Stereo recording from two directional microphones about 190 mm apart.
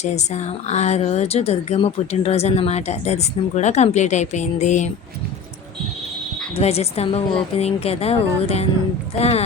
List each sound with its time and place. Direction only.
0.0 s speech: 35° left (ahead or behind)
6.6 s speech: 35° left (ahead or behind)